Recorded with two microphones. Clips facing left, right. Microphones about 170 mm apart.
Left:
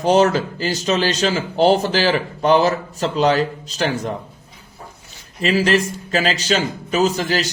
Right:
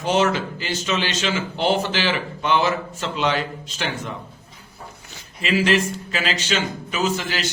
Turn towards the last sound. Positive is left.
turn(degrees=40)  # may be behind; listen again after turning